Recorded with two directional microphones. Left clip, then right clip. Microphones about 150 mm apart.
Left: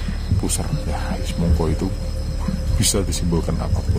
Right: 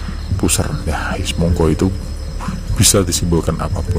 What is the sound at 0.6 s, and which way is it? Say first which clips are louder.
Speech: right 7 dB; 35° right (ahead or behind).